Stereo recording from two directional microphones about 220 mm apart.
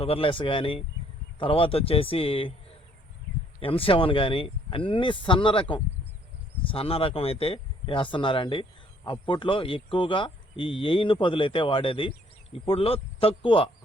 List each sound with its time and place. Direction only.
0.0 s speech: 25° left (ahead or behind)